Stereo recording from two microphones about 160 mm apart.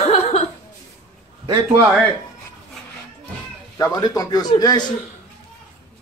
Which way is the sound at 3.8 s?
25° left (ahead or behind).